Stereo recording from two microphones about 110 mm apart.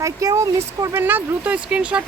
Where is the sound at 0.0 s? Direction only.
30° right (ahead or behind).